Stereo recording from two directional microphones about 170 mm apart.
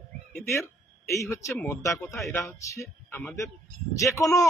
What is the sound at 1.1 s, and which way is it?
Speech, 20° left (ahead or behind).